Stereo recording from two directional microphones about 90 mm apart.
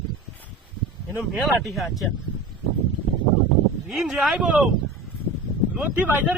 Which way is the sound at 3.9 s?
10° right (ahead or behind).